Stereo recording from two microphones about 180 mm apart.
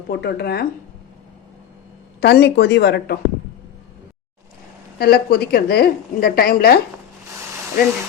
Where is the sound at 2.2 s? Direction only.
65° left (ahead or behind).